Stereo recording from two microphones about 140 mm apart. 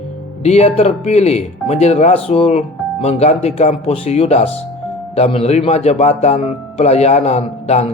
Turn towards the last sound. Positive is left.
turn(degrees=50)  # may be behind; listen again after turning